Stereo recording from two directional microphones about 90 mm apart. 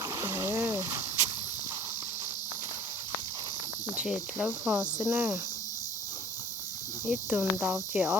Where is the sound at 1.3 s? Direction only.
40° right (ahead or behind).